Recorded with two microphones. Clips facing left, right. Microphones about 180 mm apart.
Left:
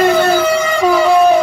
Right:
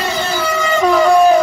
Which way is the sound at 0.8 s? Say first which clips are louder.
Right 1 dB; 5° left (ahead or behind).